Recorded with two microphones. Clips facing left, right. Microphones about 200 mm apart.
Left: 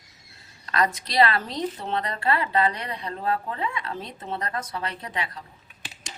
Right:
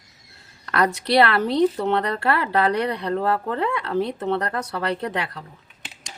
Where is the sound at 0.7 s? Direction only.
65° right (ahead or behind).